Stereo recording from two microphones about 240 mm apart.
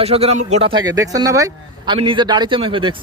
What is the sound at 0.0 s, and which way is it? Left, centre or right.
Speech, right.